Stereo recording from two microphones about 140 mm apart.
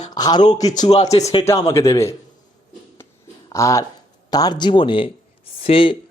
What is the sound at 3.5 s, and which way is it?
Speech, 20° left (ahead or behind).